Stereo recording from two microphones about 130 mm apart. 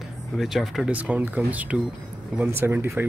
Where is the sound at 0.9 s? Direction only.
10° right (ahead or behind).